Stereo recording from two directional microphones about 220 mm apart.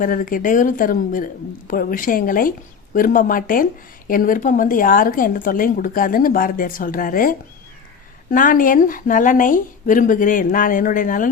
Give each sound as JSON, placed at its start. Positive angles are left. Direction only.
{"t": 0.0, "sound": "speech", "side_deg": 40}